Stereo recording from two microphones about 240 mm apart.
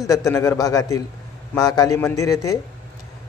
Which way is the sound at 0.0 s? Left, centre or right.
Centre.